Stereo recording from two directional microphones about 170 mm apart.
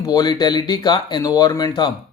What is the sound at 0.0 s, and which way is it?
A man's voice, 25° left (ahead or behind).